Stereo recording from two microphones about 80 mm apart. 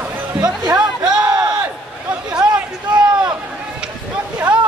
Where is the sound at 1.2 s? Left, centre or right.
Right.